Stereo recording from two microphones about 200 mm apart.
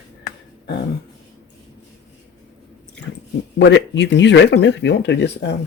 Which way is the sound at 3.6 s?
65° left (ahead or behind).